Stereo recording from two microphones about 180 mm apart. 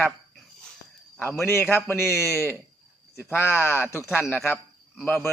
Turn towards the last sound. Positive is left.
turn(degrees=0)  # may be behind; listen again after turning